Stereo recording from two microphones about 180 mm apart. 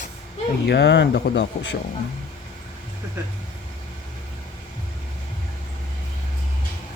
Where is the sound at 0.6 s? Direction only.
70° left (ahead or behind).